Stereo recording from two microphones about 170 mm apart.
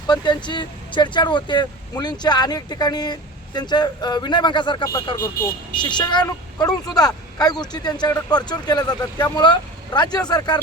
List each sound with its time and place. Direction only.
0.1 s speech: 25° left (ahead or behind)
5.4 s speech: 60° left (ahead or behind)
5.7 s speech: 25° left (ahead or behind)